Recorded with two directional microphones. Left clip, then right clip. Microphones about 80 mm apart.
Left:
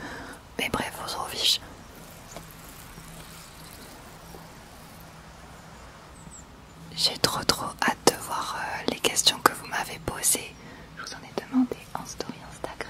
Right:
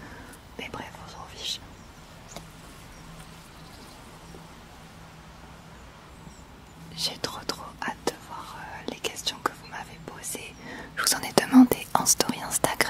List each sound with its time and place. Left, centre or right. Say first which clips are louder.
0.0 s whispering: left 6 dB; left
6.9 s whispering: left 5 dB; centre
7.2 s whispering: left 8 dB; left
8.7 s whispering: left 6 dB; centre
11.0 s whispering: right 12 dB; right